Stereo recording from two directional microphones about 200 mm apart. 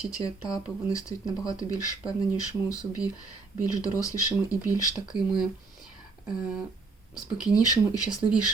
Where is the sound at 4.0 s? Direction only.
15° left (ahead or behind).